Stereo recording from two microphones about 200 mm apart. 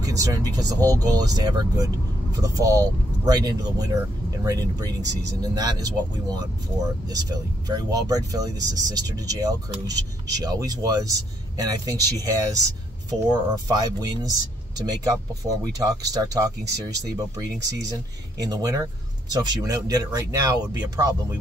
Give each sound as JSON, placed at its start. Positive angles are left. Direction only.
{"t": 0.0, "sound": "speech", "side_deg": -15}
{"t": 15.6, "sound": "speech", "side_deg": -20}
{"t": 18.4, "sound": "speech", "side_deg": -20}